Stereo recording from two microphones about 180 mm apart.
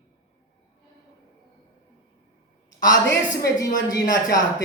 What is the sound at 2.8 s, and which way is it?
Speech, 20° left (ahead or behind).